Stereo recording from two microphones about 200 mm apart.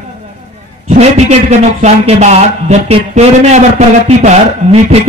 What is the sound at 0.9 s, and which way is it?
A man's voice, 35° right (ahead or behind).